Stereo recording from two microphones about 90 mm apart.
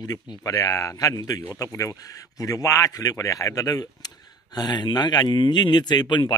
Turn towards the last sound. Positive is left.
turn(degrees=55)  # may be behind; listen again after turning